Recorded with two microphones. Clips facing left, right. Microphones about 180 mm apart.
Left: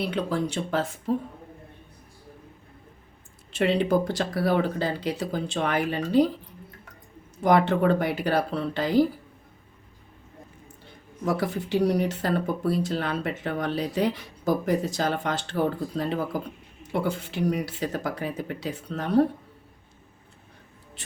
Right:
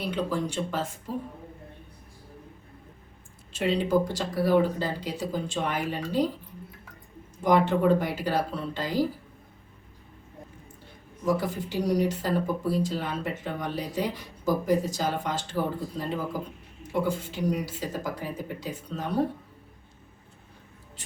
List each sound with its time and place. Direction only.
0.3 s speech: 65° left (ahead or behind)
3.5 s speech: 65° left (ahead or behind)
7.4 s speech: 65° left (ahead or behind)
11.3 s speech: 70° left (ahead or behind)